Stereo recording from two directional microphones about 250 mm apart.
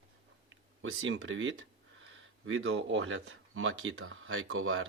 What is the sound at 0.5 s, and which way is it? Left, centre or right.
Speech, right.